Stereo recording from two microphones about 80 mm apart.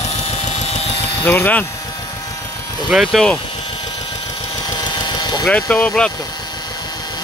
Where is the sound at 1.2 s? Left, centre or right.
Left.